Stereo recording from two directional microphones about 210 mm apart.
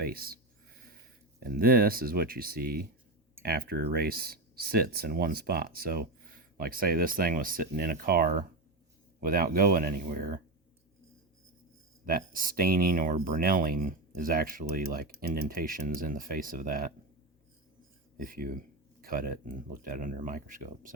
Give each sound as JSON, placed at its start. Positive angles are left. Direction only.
{"t": 0.0, "sound": "speech", "side_deg": -45}
{"t": 1.4, "sound": "speech", "side_deg": -45}
{"t": 12.0, "sound": "speech", "side_deg": -45}
{"t": 18.2, "sound": "speech", "side_deg": -45}